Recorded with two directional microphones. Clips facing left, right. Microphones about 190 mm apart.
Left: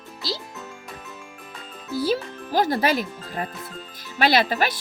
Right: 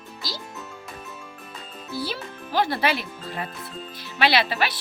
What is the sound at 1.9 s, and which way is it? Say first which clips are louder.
Speech: left 7 dB; 40° left (ahead or behind).